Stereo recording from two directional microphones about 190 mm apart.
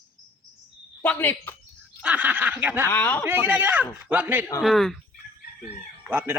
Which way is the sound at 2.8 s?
10° left (ahead or behind).